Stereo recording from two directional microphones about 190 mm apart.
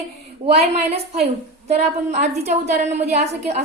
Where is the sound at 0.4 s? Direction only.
35° right (ahead or behind).